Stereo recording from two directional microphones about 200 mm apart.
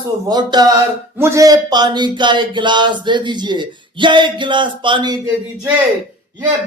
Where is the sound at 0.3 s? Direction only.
20° right (ahead or behind).